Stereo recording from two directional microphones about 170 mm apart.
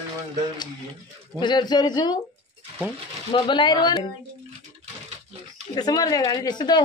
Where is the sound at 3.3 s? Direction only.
30° left (ahead or behind).